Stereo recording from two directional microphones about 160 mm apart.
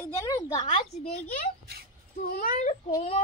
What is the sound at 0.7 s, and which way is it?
Speech, 40° left (ahead or behind).